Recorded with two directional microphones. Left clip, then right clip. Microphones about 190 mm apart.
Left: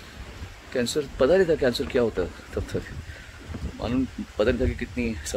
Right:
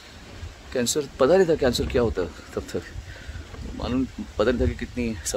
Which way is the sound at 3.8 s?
15° right (ahead or behind).